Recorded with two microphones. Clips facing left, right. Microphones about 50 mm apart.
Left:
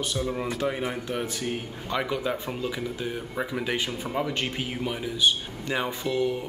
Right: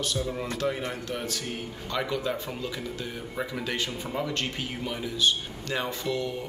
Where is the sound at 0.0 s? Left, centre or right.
Centre.